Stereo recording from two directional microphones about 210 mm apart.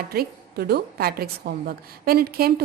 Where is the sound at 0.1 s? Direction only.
45° right (ahead or behind).